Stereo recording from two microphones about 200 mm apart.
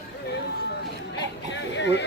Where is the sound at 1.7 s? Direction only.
60° left (ahead or behind).